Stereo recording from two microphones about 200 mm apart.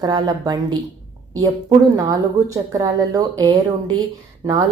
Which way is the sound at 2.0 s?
20° right (ahead or behind).